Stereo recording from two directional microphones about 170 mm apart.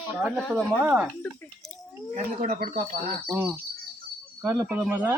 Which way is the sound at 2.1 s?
45° right (ahead or behind).